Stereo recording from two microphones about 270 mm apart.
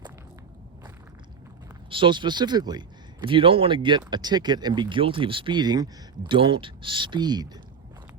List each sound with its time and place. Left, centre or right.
1.9 s speech: centre